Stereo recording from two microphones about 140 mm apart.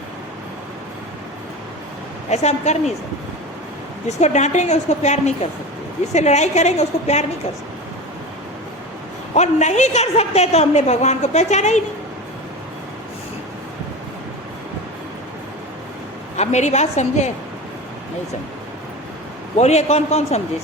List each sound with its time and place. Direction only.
2.3 s a woman's voice: 55° left (ahead or behind)
4.2 s a woman's voice: 55° left (ahead or behind)
9.3 s a woman's voice: 55° left (ahead or behind)
16.4 s a woman's voice: 55° left (ahead or behind)
19.5 s a woman's voice: 50° left (ahead or behind)